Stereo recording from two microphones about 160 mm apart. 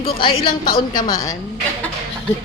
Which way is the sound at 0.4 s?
65° left (ahead or behind).